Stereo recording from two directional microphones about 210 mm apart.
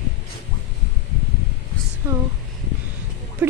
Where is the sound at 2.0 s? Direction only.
10° right (ahead or behind).